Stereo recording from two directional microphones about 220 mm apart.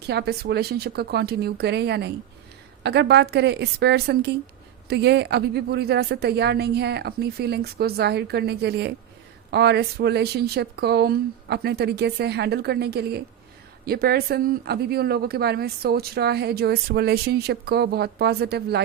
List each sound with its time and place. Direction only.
0.0 s speech: 45° right (ahead or behind)